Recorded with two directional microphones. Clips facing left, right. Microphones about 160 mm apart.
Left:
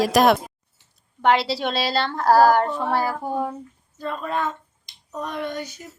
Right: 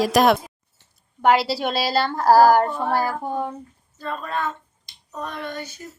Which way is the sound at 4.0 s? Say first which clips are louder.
Left 1 dB; 15° left (ahead or behind).